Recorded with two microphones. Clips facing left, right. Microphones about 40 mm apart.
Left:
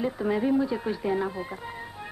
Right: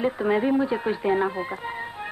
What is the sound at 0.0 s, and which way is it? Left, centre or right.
Speech, right.